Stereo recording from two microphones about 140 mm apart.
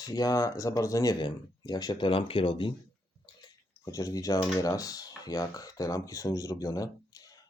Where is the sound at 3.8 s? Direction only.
25° left (ahead or behind).